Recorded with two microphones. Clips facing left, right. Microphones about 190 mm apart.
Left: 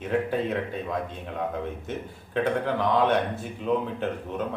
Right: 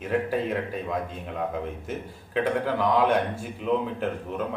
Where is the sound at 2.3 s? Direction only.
10° right (ahead or behind).